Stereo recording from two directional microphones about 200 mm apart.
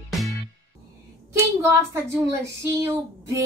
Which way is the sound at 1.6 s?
15° right (ahead or behind).